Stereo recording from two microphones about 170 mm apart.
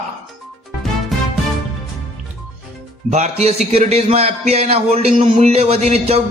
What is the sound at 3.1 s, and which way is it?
A man's voice, 40° right (ahead or behind).